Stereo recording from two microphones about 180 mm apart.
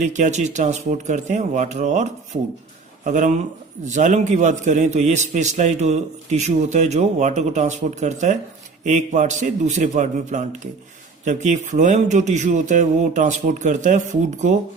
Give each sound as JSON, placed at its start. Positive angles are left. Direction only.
{"t": 0.0, "sound": "a man's voice", "side_deg": -45}